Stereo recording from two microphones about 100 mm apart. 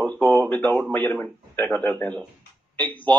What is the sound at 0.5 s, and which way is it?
A man's voice, 15° left (ahead or behind).